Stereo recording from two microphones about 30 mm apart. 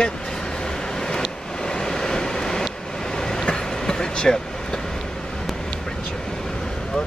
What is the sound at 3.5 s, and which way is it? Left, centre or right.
Train, left.